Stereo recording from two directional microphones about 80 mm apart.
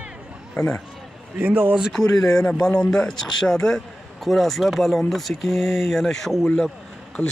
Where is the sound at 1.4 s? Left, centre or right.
Right.